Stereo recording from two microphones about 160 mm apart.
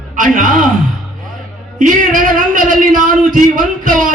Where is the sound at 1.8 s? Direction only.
60° right (ahead or behind).